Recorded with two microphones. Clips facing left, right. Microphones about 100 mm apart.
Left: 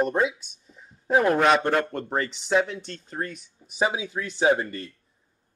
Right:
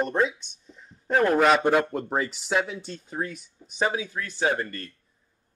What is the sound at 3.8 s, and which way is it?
Speech, 15° left (ahead or behind).